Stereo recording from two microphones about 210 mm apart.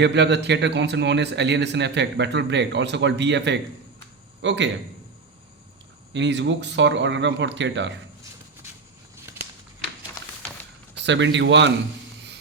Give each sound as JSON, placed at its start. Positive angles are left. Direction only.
{"t": 0.0, "sound": "a man's voice", "side_deg": -55}
{"t": 6.1, "sound": "speech", "side_deg": -55}
{"t": 10.9, "sound": "a man's voice", "side_deg": -60}